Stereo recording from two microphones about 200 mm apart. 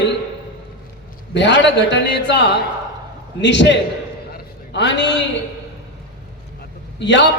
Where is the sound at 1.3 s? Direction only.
60° left (ahead or behind).